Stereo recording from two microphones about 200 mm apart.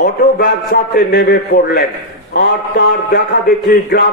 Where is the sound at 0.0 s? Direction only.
45° left (ahead or behind).